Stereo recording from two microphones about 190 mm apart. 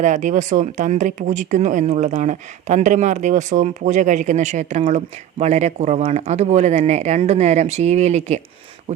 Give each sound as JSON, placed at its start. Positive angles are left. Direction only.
{"t": 0.0, "sound": "speech", "side_deg": -40}